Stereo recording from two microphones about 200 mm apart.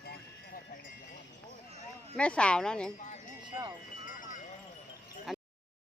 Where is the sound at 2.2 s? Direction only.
5° left (ahead or behind).